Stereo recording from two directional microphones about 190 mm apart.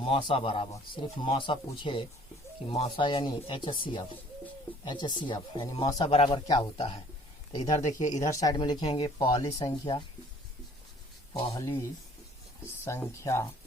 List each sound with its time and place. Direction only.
0.0 s speech: 25° left (ahead or behind)
8.1 s speech: 20° left (ahead or behind)
11.3 s speech: 20° left (ahead or behind)